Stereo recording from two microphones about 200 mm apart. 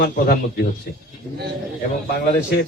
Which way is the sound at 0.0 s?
55° left (ahead or behind).